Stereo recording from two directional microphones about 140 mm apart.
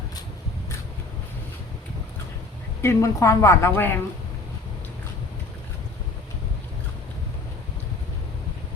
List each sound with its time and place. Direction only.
2.8 s a woman's voice: 20° left (ahead or behind)